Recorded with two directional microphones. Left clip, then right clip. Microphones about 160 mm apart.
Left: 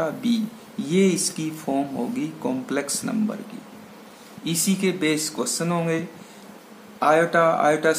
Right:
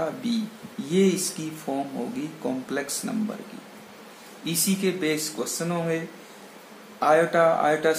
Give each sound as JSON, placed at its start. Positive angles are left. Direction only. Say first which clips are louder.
{"t": 0.0, "sound": "speech", "louder": "left 3 dB", "side_deg": 20}
{"t": 4.5, "sound": "speech", "louder": "left 2 dB", "side_deg": 15}